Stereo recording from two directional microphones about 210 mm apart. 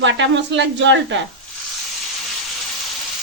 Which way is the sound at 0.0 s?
60° right (ahead or behind).